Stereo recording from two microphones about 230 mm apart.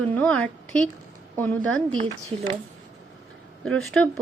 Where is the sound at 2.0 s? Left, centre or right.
Right.